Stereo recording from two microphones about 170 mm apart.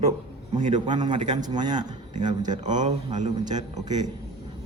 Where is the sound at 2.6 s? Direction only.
45° right (ahead or behind).